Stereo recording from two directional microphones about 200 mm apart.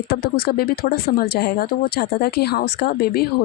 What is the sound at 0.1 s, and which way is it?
Speech, 50° left (ahead or behind).